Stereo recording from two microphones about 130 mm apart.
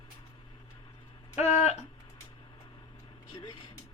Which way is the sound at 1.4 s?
60° left (ahead or behind).